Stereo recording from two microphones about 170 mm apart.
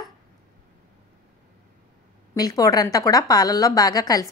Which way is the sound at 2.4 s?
20° left (ahead or behind).